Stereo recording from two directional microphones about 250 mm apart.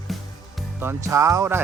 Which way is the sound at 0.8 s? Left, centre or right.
Centre.